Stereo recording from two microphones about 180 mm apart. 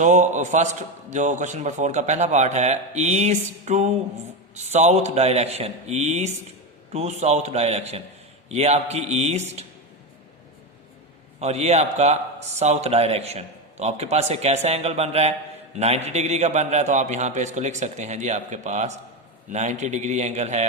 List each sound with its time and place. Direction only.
0.0 s a man's voice: 40° right (ahead or behind)
11.3 s a man's voice: 35° right (ahead or behind)